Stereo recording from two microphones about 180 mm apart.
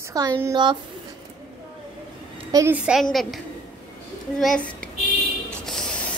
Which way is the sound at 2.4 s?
20° right (ahead or behind).